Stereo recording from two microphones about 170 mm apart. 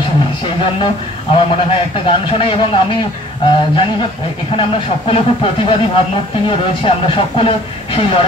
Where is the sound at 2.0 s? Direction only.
30° left (ahead or behind).